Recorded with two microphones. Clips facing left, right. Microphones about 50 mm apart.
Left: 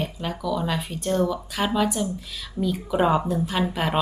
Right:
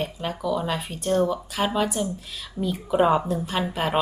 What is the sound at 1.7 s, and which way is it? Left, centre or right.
Speech, centre.